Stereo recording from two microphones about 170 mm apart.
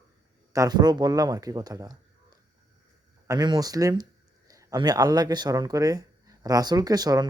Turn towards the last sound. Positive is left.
turn(degrees=-25)  # may be behind; listen again after turning